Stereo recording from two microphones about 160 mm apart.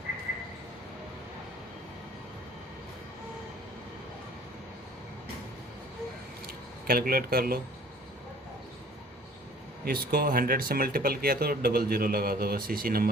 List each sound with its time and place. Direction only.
6.8 s speech: 65° right (ahead or behind)
9.8 s speech: 70° right (ahead or behind)